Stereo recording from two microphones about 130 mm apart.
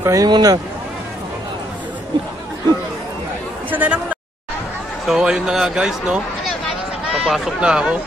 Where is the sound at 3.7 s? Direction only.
10° right (ahead or behind).